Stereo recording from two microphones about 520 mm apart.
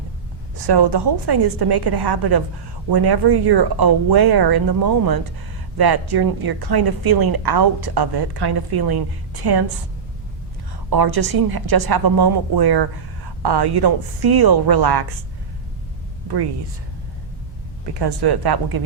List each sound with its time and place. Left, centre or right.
0.7 s a woman's voice: right
10.8 s a woman's voice: right
18.0 s a woman's voice: right